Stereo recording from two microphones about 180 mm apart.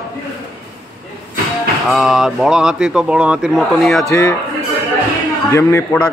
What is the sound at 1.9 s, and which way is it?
Speech, centre (ahead or behind).